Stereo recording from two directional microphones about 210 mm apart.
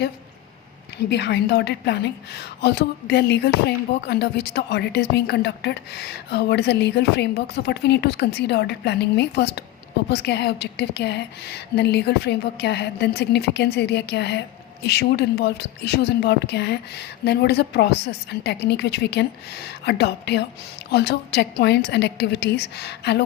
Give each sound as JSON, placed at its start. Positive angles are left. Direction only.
{"t": 1.1, "sound": "a woman's voice", "side_deg": 55}